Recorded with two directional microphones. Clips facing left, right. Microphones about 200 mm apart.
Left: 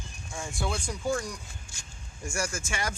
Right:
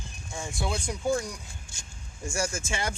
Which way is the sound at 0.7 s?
20° right (ahead or behind).